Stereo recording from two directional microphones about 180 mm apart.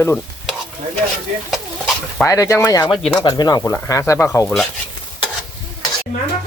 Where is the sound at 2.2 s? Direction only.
15° left (ahead or behind).